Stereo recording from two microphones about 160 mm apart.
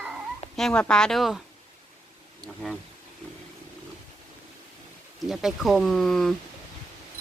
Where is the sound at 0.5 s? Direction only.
5° left (ahead or behind).